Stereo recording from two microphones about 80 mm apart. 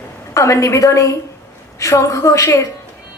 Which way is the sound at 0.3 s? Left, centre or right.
Left.